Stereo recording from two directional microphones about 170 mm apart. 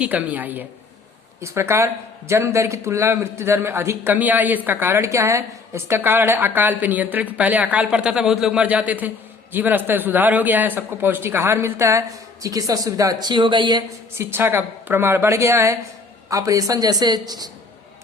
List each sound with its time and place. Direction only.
0.0 s a man's voice: 10° right (ahead or behind); by 13.8 s 25° right (ahead or behind)
14.2 s a man's voice: 15° right (ahead or behind)